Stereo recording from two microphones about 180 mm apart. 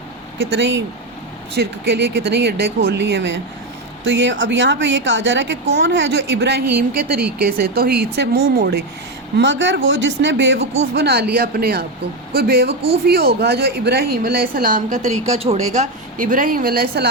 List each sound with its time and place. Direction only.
0.5 s speech: 80° right
1.5 s speech: 65° right (ahead or behind); by 5.5 s 85° right
5.7 s a woman's voice: 70° right (ahead or behind)
9.4 s speech: 90° right
10.9 s a woman's voice: 65° right (ahead or behind)